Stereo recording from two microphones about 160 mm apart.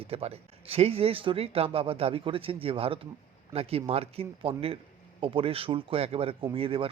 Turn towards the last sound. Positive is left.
turn(degrees=-35)  # may be behind; listen again after turning